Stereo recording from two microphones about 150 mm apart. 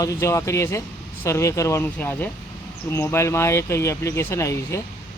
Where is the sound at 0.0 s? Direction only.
20° left (ahead or behind).